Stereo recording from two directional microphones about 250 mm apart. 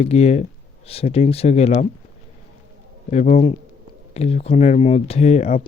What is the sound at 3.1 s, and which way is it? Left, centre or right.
Speech, left.